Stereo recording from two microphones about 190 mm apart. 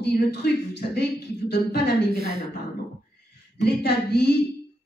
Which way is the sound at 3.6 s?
60° left (ahead or behind).